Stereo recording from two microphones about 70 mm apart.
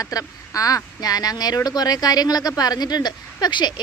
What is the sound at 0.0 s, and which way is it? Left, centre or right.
Speech, left.